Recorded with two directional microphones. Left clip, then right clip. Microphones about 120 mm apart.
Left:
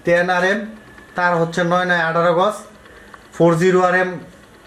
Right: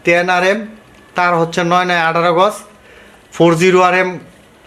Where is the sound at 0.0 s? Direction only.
70° right (ahead or behind).